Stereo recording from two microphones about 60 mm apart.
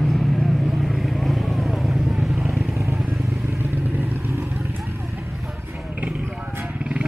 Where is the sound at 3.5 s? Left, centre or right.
Right.